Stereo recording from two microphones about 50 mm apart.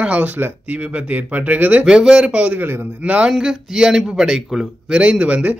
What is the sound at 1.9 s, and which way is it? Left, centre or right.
Speech, centre.